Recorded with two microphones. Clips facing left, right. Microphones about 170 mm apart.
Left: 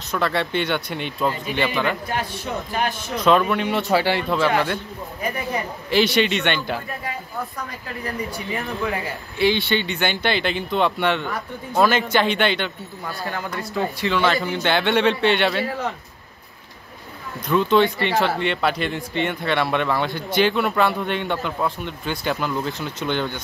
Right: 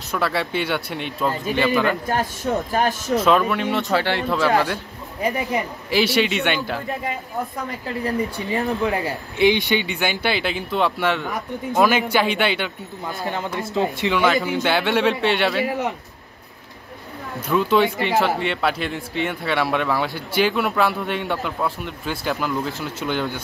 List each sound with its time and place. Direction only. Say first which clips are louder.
0.1 s a man's voice: left 1 dB; 5° right (ahead or behind)
2.7 s speech: right 1 dB; 40° right (ahead or behind)
3.2 s a man's voice: left 1 dB; centre (ahead or behind)
5.2 s speech: right 4 dB; 20° right (ahead or behind)
5.9 s a man's voice: left 1 dB; 5° right (ahead or behind)
8.0 s speech: right 4 dB; 30° right (ahead or behind)
9.5 s speech: right 2 dB; 15° right (ahead or behind)
11.3 s speech: right 1 dB; 15° right (ahead or behind)
13.0 s speech: right 2 dB; 20° right (ahead or behind)
14.3 s a man's voice: right 1 dB; 5° right (ahead or behind)
15.6 s speech: right 3 dB; 15° right (ahead or behind)
17.5 s a man's voice: left 1 dB; centre (ahead or behind)